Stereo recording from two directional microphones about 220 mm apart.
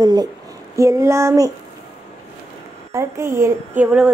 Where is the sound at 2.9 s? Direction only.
10° right (ahead or behind).